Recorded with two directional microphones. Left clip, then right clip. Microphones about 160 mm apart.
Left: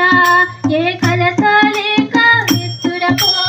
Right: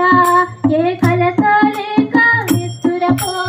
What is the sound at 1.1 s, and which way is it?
Music, 25° right (ahead or behind).